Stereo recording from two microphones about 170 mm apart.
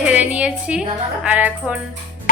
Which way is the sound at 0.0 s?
10° right (ahead or behind).